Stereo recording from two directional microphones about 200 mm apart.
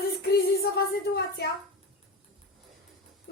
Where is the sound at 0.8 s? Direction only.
55° left (ahead or behind).